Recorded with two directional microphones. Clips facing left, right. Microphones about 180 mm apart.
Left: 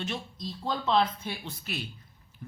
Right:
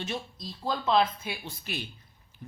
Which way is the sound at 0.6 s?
10° right (ahead or behind).